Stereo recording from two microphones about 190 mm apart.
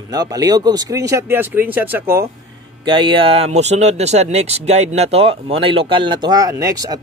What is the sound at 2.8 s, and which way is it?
Speech, 25° right (ahead or behind).